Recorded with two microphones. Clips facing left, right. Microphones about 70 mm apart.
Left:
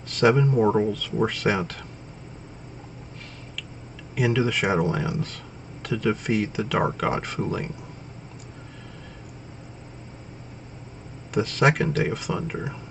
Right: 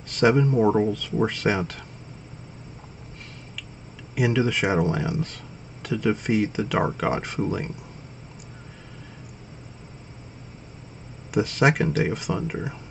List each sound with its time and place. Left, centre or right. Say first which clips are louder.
0.1 s speech: even; centre
4.1 s speech: even; centre
11.3 s speech: even; centre